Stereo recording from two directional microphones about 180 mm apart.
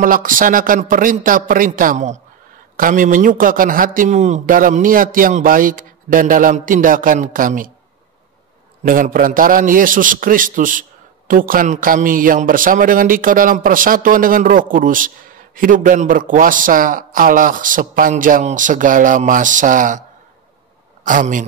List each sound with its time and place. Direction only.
0.0 s a man's voice: 50° right (ahead or behind)
8.8 s a man's voice: 50° right (ahead or behind)
21.0 s a man's voice: 45° right (ahead or behind)